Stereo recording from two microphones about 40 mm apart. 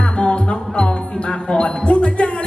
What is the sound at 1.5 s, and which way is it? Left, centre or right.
Speech, left.